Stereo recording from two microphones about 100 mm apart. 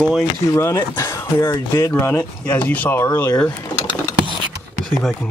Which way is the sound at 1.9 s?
20° left (ahead or behind).